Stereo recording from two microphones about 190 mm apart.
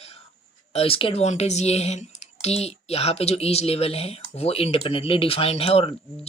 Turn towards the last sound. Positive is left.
turn(degrees=30)  # may be behind; listen again after turning